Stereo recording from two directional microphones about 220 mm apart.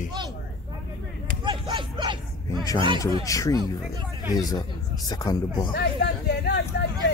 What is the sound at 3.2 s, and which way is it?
Speech, 15° left (ahead or behind).